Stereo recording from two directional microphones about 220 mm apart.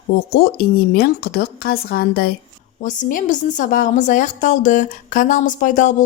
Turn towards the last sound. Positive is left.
turn(degrees=35)  # may be behind; listen again after turning